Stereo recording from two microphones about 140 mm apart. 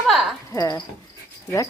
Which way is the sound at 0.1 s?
Centre (ahead or behind).